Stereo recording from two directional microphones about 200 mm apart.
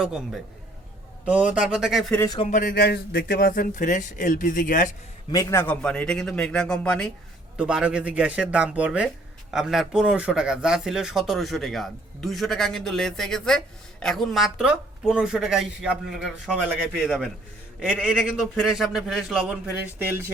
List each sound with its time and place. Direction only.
0.0 s speech: centre (ahead or behind)
2.4 s speech: 40° left (ahead or behind)
5.3 s speech: 15° left (ahead or behind); by 19.5 s 5° right (ahead or behind)